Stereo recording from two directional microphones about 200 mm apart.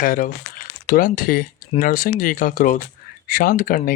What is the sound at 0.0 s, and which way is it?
Speech, 40° left (ahead or behind).